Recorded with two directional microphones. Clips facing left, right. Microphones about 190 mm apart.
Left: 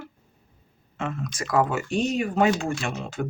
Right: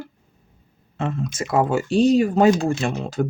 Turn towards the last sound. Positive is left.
turn(degrees=-35)  # may be behind; listen again after turning